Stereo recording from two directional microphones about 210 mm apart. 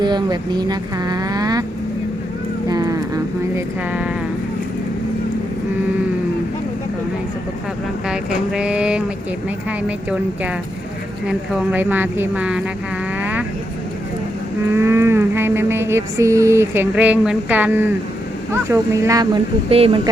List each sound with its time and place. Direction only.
0.0 s speech: 20° right (ahead or behind)
2.6 s a sound: 15° right (ahead or behind)
8.0 s speech: 5° right (ahead or behind)
11.3 s cattle: 10° right (ahead or behind)
14.7 s cattle: 10° right (ahead or behind)
18.5 s speech: 15° right (ahead or behind)